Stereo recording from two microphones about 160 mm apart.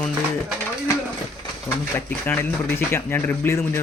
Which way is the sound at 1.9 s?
10° left (ahead or behind).